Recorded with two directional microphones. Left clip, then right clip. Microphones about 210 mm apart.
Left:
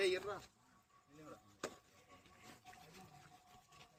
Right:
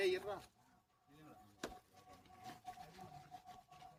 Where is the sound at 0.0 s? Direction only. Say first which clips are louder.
Left 1 dB; 50° right (ahead or behind).